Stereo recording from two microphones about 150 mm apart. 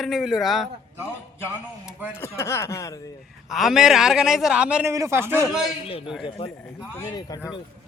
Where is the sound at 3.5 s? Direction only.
Centre (ahead or behind).